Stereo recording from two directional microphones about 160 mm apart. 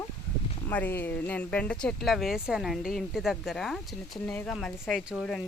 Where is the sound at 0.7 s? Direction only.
10° left (ahead or behind).